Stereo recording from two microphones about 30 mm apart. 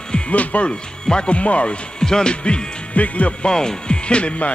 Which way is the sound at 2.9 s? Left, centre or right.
Left.